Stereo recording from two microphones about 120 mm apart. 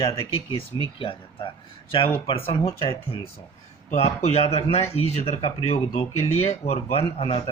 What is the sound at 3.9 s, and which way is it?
Speech, 60° left (ahead or behind).